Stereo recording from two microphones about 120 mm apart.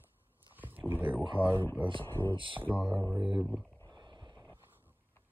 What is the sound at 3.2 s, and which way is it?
Speech, 40° right (ahead or behind).